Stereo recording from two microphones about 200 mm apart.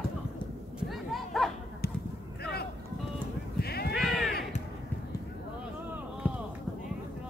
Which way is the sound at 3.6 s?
50° left (ahead or behind).